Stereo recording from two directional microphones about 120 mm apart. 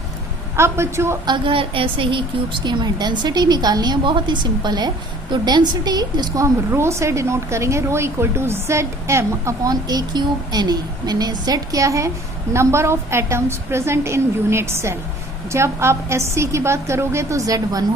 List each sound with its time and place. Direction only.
0.5 s a woman's voice: 20° right (ahead or behind)
1.2 s a woman's voice: 40° right (ahead or behind)